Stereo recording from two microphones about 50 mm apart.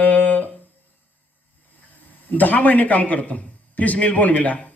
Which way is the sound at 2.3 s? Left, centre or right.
Left.